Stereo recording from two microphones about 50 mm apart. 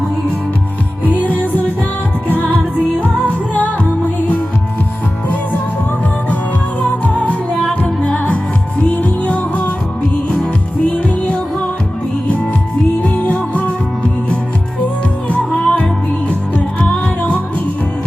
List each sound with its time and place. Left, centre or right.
1.0 s music: left
3.2 s music: left
7.0 s music: left
10.9 s music: left
13.1 s music: left
15.3 s music: left
16.8 s music: centre